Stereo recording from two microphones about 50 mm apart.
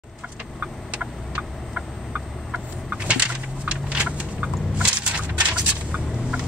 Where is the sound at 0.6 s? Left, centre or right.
Right.